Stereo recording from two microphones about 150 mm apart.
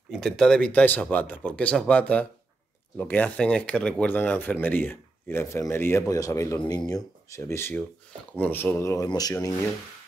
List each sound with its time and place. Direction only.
0.1 s speech: 5° left (ahead or behind); by 9.6 s 20° left (ahead or behind)